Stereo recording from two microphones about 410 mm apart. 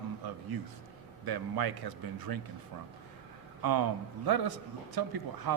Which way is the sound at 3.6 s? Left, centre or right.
Right.